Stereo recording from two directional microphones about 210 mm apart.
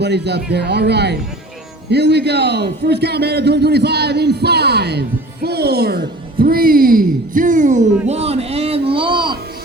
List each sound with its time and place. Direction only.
0.0 s a man's voice: 55° right (ahead or behind); by 9.4 s 20° right (ahead or behind)